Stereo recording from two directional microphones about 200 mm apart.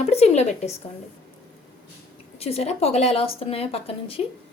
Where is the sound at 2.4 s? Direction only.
30° left (ahead or behind).